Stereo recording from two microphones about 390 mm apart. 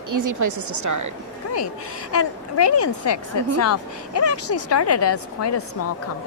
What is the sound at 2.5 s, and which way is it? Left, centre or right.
A woman's voice, left.